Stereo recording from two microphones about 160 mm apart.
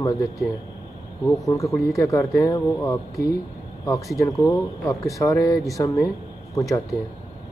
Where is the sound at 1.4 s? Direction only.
20° left (ahead or behind).